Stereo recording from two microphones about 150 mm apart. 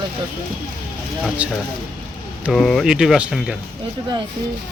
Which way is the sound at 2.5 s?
Centre (ahead or behind).